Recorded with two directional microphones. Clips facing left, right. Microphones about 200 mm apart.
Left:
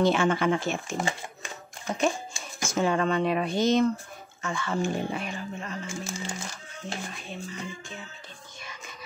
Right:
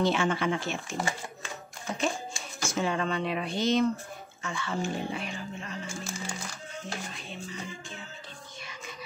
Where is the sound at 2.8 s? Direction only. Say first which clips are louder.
Left 5 dB; 50° left (ahead or behind).